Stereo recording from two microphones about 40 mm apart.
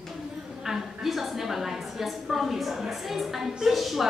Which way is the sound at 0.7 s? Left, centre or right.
Centre.